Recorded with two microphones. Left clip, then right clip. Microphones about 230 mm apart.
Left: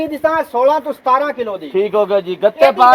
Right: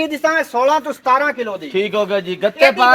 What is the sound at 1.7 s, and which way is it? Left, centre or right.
Speech, right.